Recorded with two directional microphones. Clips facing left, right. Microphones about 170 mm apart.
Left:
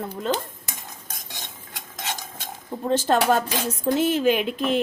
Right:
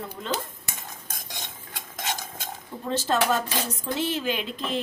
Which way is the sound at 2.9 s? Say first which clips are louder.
Left 4 dB; 50° left (ahead or behind).